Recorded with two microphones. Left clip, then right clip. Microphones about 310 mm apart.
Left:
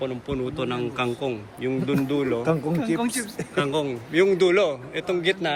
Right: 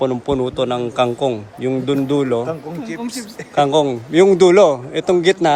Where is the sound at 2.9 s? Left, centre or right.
Left.